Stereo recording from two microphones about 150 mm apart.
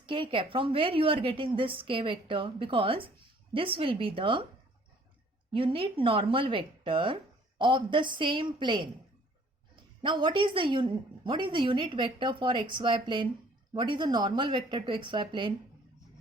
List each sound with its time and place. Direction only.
0.0 s a woman's voice: 35° right (ahead or behind)
5.5 s a woman's voice: 35° right (ahead or behind)
10.0 s a woman's voice: 35° right (ahead or behind)